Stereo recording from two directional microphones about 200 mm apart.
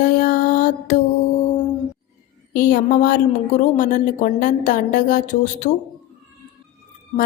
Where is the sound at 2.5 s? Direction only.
45° left (ahead or behind).